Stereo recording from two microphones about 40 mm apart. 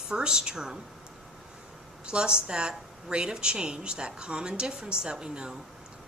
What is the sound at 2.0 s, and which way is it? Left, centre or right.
Speech, right.